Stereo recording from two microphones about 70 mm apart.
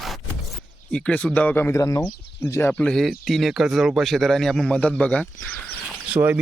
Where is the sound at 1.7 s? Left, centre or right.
Left.